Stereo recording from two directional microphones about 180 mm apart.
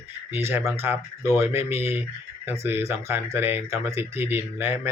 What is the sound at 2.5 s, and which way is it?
Speech, 10° right (ahead or behind).